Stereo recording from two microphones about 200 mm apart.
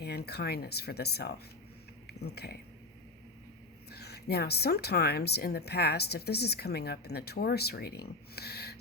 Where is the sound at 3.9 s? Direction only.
55° left (ahead or behind).